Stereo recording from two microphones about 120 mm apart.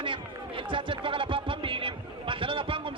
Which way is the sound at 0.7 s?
45° right (ahead or behind).